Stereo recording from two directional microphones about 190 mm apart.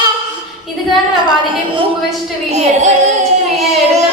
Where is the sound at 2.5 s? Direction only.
40° right (ahead or behind).